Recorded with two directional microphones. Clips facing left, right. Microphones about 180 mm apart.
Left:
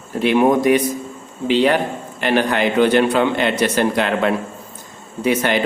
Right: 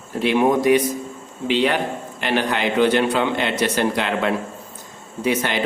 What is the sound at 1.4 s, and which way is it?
Speech, 40° left (ahead or behind).